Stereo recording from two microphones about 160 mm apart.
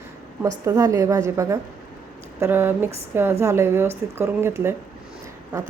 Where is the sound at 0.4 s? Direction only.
20° right (ahead or behind).